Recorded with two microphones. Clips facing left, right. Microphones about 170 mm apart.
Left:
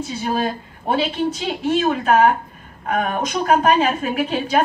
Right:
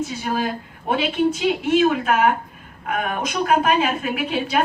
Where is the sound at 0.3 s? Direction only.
30° left (ahead or behind).